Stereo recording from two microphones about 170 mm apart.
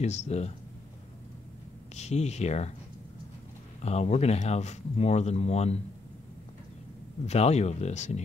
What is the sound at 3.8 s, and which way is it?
Speech, 40° left (ahead or behind).